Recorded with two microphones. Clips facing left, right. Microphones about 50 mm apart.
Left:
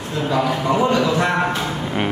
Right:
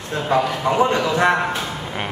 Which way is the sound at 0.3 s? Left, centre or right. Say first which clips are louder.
Right 1 dB; right.